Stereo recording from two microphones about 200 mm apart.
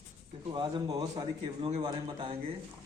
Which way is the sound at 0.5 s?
20° right (ahead or behind).